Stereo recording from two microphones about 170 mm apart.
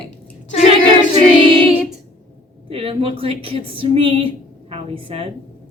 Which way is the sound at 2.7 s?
35° right (ahead or behind).